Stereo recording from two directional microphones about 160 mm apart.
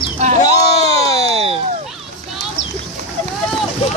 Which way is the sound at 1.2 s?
40° right (ahead or behind).